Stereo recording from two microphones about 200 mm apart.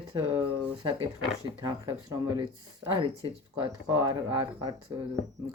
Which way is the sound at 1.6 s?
20° right (ahead or behind).